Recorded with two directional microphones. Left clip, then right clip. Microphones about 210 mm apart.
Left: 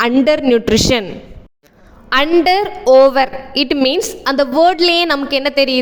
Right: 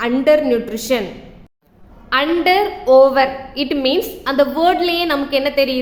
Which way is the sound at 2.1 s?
50° left (ahead or behind).